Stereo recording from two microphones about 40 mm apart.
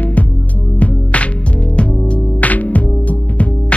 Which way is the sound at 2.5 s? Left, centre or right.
Left.